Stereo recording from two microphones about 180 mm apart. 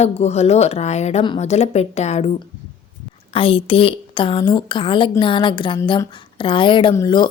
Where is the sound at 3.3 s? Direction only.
30° left (ahead or behind).